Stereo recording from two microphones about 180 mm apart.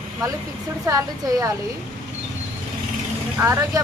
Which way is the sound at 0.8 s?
20° right (ahead or behind).